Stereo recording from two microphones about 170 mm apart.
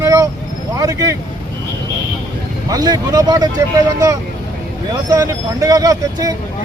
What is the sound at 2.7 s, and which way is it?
Speech, 20° right (ahead or behind).